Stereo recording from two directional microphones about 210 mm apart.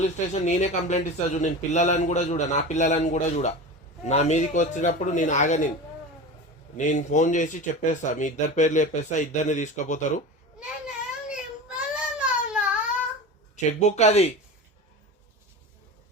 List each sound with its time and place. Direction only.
0.0 s speech: 35° left (ahead or behind)
6.7 s speech: 35° left (ahead or behind)
11.3 s a sound: 5° right (ahead or behind)
13.7 s speech: 30° left (ahead or behind)